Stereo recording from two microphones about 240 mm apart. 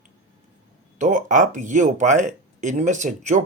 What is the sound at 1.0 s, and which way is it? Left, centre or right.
Speech, right.